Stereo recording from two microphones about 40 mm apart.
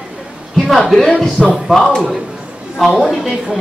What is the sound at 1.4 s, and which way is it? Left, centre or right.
Speech, right.